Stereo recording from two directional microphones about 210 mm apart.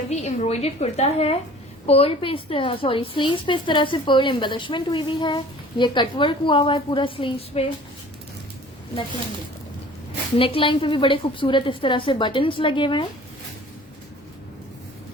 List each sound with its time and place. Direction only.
0.1 s a woman's voice: 30° left (ahead or behind)
10.3 s a woman's voice: 25° left (ahead or behind)